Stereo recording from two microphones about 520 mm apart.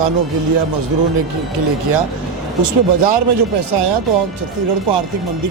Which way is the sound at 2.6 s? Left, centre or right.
Right.